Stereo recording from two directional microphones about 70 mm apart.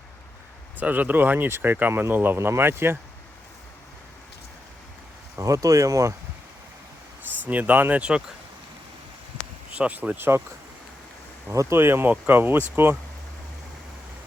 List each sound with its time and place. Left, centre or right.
0.8 s speech: right
5.4 s speech: right
7.4 s speech: right
9.7 s speech: centre
10.2 s speech: right
11.5 s speech: right
11.8 s speech: right
12.1 s speech: right